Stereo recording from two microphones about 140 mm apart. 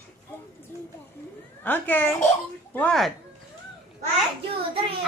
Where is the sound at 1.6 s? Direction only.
15° left (ahead or behind).